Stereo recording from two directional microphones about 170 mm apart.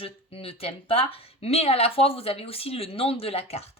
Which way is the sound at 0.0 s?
35° left (ahead or behind).